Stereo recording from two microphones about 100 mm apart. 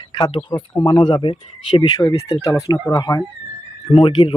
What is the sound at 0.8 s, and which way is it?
Speech, 45° left (ahead or behind).